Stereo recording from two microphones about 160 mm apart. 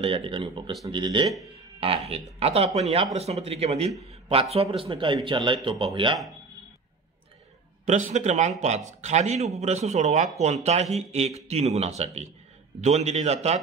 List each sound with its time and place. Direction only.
0.0 s speech: 35° right (ahead or behind)
7.8 s speech: 50° right (ahead or behind)